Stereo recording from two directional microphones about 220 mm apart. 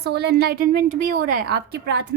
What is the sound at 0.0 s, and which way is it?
A woman's voice, 50° right (ahead or behind).